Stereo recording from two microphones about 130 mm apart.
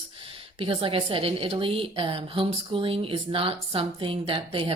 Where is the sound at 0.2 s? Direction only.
45° right (ahead or behind).